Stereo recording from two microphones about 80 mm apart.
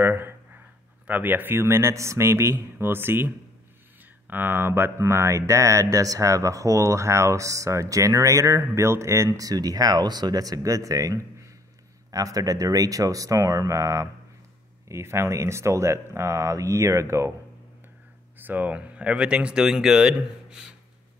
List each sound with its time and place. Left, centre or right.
0.0 s a sound: right
1.0 s a man's voice: right
9.5 s speech: right
18.4 s speech: right